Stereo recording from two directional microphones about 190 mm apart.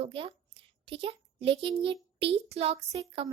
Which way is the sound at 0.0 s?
30° right (ahead or behind).